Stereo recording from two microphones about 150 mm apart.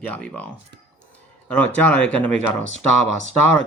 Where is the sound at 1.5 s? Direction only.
10° left (ahead or behind).